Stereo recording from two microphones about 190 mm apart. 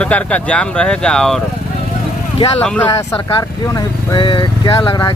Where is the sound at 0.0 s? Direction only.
5° left (ahead or behind).